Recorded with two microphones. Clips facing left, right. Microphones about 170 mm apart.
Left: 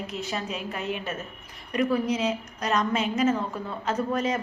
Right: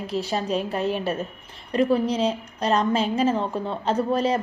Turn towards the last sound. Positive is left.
turn(degrees=-30)  # may be behind; listen again after turning